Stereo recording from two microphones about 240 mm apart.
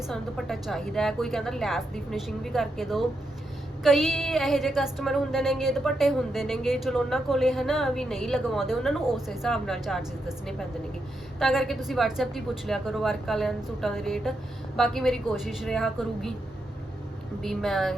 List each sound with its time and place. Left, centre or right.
0.1 s speech: centre
17.4 s speech: centre